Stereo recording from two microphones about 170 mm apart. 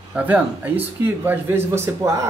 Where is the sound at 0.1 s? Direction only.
10° right (ahead or behind).